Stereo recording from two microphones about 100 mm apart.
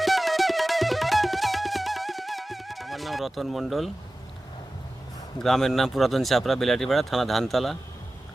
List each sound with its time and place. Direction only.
0.0 s music: centre (ahead or behind)
5.4 s speech: 5° left (ahead or behind)